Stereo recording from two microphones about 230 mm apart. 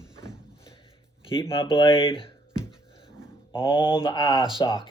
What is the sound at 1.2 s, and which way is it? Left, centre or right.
Speech, left.